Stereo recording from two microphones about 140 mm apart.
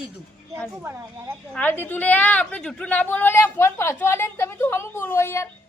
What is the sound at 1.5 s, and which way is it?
A woman's voice, 15° left (ahead or behind).